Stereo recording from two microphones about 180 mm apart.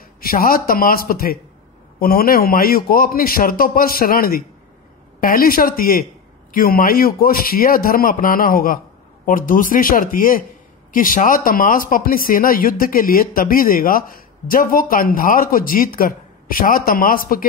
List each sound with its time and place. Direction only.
0.2 s speech: 55° left (ahead or behind)